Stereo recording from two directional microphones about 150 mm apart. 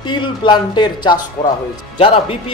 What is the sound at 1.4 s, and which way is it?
Speech, 70° left (ahead or behind).